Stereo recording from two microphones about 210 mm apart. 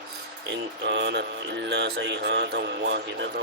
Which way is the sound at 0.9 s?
55° right (ahead or behind).